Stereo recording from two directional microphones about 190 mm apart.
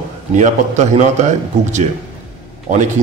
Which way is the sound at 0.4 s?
40° right (ahead or behind).